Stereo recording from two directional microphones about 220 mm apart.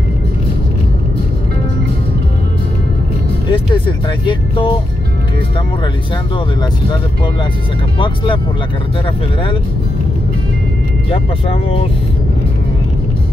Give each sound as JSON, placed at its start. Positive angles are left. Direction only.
{"t": 3.4, "sound": "music", "side_deg": 20}
{"t": 4.3, "sound": "speech", "side_deg": 20}